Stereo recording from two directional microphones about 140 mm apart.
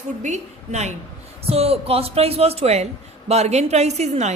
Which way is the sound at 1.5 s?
45° right (ahead or behind).